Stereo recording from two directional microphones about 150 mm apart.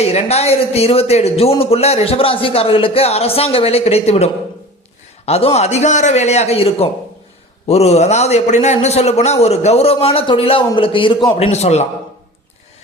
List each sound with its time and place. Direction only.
0.0 s a man's voice: 45° left (ahead or behind)
11.3 s a man's voice: 45° left (ahead or behind)